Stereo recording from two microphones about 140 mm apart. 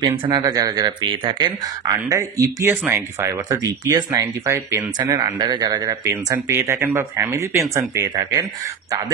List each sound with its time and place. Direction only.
0.0 s speech: 30° right (ahead or behind)
2.0 s speech: 20° right (ahead or behind)